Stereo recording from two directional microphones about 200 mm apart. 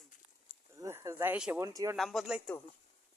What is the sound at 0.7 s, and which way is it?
Speech, 15° right (ahead or behind).